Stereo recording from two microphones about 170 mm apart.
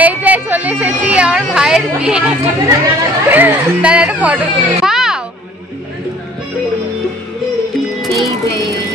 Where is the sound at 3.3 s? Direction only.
10° right (ahead or behind).